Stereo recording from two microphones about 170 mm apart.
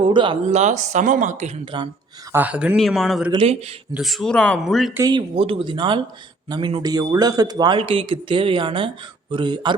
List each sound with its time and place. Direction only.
0.0 s speech: 30° right (ahead or behind)
0.5 s speech: 45° right (ahead or behind)
1.6 s a man's voice: 30° right (ahead or behind)
2.3 s speech: 10° right (ahead or behind)
3.3 s speech: 35° right (ahead or behind)
3.9 s speech: centre (ahead or behind)
4.9 s a man's voice: 25° right (ahead or behind)